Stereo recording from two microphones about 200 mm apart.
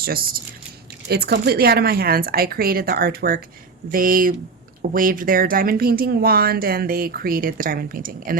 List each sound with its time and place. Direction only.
0.0 s speech: 45° right (ahead or behind)